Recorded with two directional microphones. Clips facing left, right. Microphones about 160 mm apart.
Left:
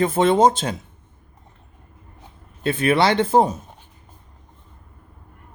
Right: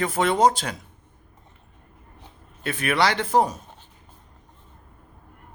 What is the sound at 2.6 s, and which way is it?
Speech, 25° left (ahead or behind).